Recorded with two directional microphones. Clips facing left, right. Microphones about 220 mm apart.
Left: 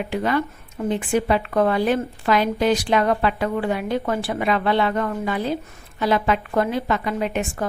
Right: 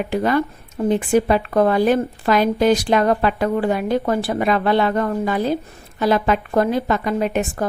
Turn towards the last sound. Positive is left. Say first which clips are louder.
# right 4 dB
turn(degrees=-40)  # may be behind; listen again after turning